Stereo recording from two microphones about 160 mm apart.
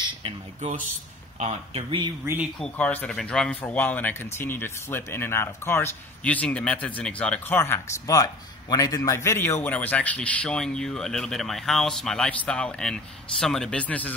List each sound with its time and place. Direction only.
0.6 s a man's voice: 50° right (ahead or behind); by 2.1 s 30° right (ahead or behind)
2.2 s speech: 10° right (ahead or behind)
2.6 s speech: 10° left (ahead or behind)